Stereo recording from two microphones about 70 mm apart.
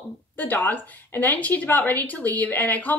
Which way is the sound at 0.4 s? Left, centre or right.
Left.